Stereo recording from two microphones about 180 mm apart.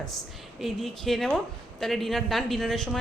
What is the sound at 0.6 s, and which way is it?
Speech, centre (ahead or behind).